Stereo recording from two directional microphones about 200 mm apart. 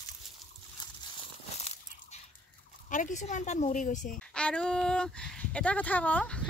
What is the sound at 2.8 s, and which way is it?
Speech, 40° left (ahead or behind).